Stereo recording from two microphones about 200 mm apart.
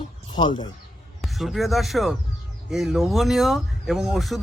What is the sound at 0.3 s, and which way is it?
Speech, 20° left (ahead or behind).